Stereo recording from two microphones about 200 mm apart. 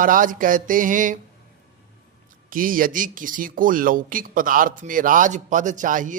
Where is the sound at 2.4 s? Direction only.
45° right (ahead or behind).